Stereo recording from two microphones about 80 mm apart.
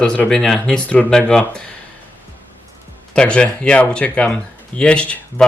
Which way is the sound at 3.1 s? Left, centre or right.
Centre.